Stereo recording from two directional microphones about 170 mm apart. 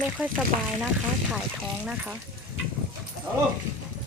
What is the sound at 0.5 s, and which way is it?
Speech, 50° right (ahead or behind).